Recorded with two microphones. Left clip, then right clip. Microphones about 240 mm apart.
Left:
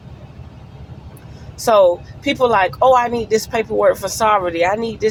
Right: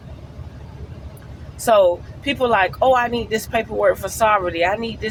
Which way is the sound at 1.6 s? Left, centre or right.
Left.